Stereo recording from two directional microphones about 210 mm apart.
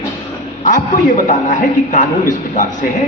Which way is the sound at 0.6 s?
40° left (ahead or behind).